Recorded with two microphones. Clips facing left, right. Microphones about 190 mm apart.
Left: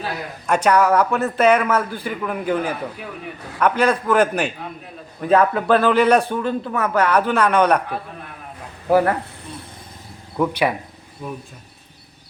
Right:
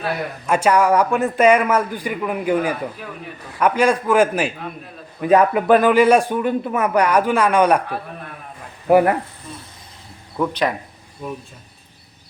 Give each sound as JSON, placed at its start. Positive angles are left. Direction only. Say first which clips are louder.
{"t": 0.4, "sound": "a man's voice", "louder": "even", "side_deg": -5}
{"t": 10.3, "sound": "speech", "louder": "left 1 dB", "side_deg": 10}